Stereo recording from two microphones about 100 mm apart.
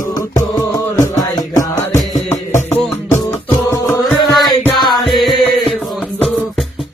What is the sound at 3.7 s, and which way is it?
Music, 30° left (ahead or behind).